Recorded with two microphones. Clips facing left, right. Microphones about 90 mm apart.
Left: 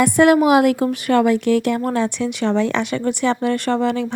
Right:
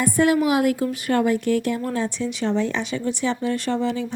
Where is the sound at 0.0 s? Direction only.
80° left.